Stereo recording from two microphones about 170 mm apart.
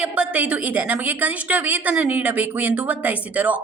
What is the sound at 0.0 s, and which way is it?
A woman's voice, 10° right (ahead or behind).